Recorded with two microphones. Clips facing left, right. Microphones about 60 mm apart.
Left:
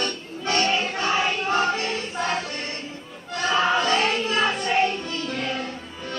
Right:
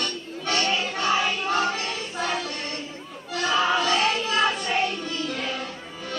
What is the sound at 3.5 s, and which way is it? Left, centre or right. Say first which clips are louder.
Music: left 1 dB; left.